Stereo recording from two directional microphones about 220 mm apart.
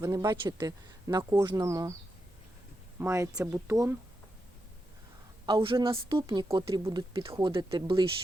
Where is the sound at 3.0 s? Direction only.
15° right (ahead or behind).